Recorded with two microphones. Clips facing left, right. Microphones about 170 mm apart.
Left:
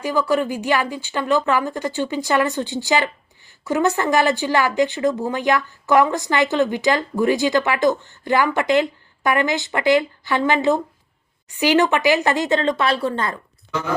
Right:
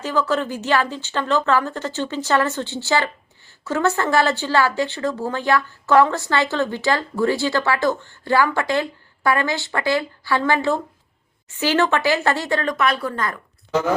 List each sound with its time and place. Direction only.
0.0 s speech: 10° left (ahead or behind)